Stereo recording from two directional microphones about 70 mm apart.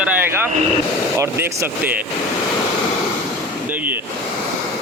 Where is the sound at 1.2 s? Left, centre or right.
Right.